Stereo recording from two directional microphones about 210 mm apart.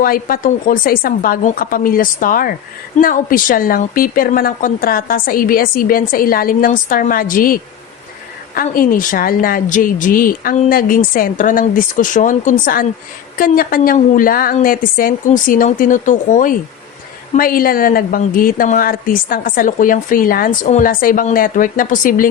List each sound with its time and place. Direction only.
0.0 s a woman's voice: 40° left (ahead or behind)